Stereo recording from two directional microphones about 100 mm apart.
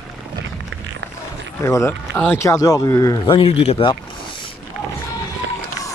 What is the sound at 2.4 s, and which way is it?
Speech, 35° left (ahead or behind).